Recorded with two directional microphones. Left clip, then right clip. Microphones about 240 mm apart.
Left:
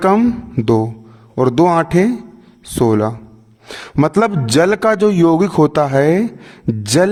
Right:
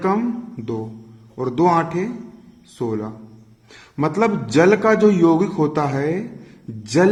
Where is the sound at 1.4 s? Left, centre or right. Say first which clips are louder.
Left 5 dB; left.